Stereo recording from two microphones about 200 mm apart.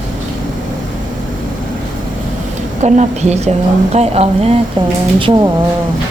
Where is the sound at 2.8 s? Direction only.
35° right (ahead or behind).